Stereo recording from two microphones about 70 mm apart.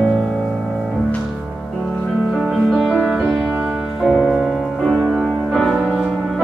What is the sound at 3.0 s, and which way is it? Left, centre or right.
Music, centre.